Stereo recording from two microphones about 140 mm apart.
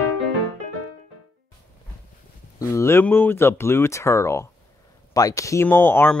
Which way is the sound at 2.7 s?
20° left (ahead or behind).